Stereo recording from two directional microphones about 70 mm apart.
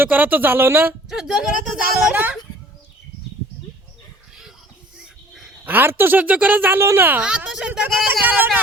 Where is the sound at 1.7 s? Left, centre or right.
Right.